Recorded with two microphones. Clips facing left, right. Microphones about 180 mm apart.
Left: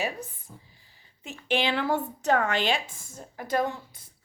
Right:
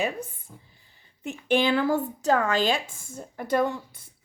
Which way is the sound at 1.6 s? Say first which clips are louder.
Right 4 dB; 40° right (ahead or behind).